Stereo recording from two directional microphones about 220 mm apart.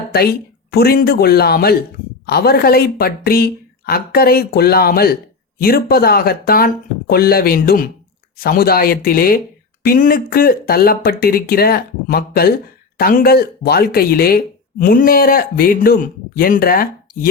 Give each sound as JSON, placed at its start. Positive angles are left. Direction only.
{"t": 0.1, "sound": "speech", "side_deg": 45}